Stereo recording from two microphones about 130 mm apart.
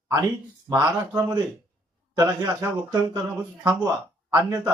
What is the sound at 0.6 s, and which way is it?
Speech, 20° right (ahead or behind).